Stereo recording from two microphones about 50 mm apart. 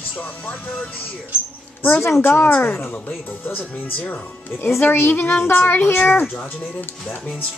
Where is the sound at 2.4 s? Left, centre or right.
Left.